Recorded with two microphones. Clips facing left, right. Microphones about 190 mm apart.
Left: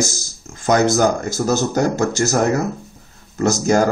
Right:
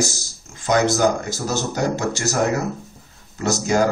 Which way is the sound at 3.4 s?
45° left (ahead or behind).